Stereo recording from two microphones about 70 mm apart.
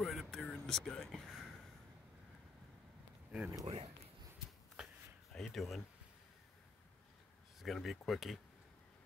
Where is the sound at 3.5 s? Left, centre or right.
Right.